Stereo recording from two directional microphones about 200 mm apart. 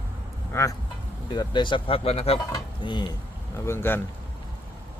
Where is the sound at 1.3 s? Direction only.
20° left (ahead or behind).